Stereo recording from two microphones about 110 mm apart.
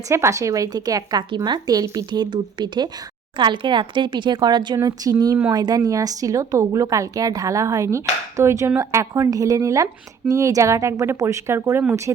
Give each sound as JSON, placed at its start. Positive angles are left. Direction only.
{"t": 0.1, "sound": "a woman's voice", "side_deg": -25}